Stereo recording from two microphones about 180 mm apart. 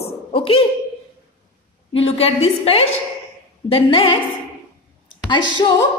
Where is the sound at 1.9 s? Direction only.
30° left (ahead or behind).